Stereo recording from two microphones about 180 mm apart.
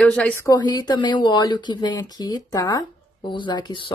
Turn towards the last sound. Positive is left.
turn(degrees=25)  # may be behind; listen again after turning